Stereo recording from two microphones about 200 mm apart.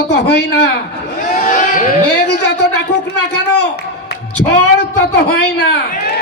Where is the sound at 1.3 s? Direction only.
40° left (ahead or behind).